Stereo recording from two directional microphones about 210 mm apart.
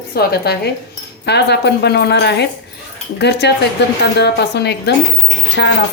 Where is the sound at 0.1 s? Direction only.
50° left (ahead or behind).